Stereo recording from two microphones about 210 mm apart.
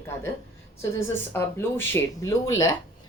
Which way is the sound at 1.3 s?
10° left (ahead or behind).